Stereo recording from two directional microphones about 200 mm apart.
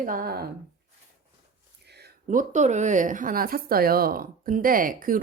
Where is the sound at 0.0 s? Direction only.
45° right (ahead or behind).